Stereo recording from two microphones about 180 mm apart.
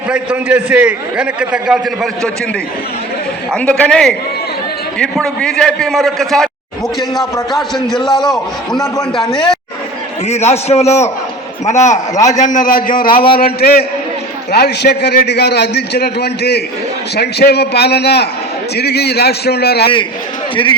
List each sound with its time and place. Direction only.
0.1 s a man's voice: 10° right (ahead or behind)
3.5 s a man's voice: 5° left (ahead or behind)
7.5 s a man's voice: centre (ahead or behind)
10.2 s a man's voice: 35° left (ahead or behind)
13.1 s speech: 30° left (ahead or behind)
13.4 s a man's voice: 55° left (ahead or behind)